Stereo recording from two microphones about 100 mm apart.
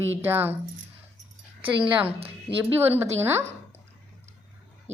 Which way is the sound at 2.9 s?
25° right (ahead or behind).